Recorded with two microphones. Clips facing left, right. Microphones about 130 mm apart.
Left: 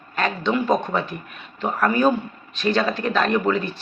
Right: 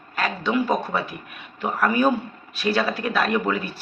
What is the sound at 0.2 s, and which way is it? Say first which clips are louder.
A man's voice: left 1 dB; 5° right (ahead or behind).